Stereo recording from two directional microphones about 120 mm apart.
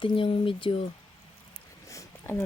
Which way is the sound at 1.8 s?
25° left (ahead or behind).